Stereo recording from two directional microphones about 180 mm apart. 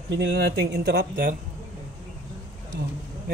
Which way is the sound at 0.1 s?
70° right (ahead or behind).